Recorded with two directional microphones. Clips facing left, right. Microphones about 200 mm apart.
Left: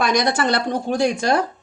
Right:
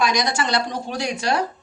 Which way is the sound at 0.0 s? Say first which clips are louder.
Left 3 dB; 55° left (ahead or behind).